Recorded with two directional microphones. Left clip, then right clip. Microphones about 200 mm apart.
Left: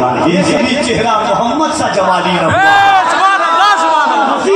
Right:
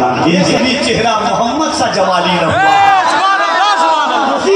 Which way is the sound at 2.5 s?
25° left (ahead or behind).